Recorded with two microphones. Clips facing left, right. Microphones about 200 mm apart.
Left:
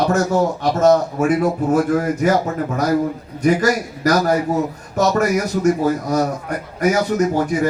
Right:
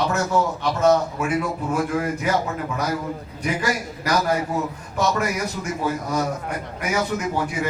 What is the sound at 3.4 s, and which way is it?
A man's voice, 45° left (ahead or behind).